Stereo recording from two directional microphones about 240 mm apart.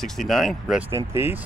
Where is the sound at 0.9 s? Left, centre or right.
Centre.